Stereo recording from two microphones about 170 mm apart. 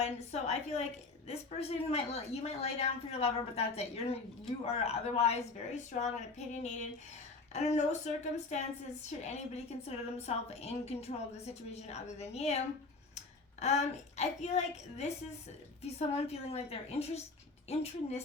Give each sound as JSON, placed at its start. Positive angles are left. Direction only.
{"t": 0.0, "sound": "a woman's voice", "side_deg": 40}
{"t": 13.6, "sound": "a woman's voice", "side_deg": 40}